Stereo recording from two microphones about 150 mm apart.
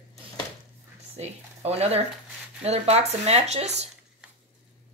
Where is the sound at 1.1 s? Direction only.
45° right (ahead or behind).